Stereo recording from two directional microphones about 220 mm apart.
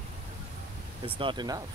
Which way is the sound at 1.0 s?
20° right (ahead or behind).